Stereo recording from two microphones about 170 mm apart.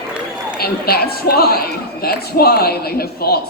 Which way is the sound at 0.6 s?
65° left (ahead or behind).